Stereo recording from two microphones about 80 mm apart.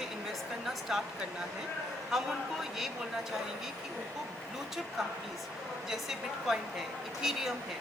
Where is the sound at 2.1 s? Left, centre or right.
Centre.